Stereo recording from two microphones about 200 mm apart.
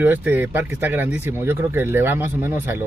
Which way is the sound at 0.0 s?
10° right (ahead or behind).